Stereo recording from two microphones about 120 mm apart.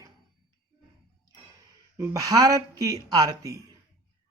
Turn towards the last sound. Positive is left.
turn(degrees=-30)  # may be behind; listen again after turning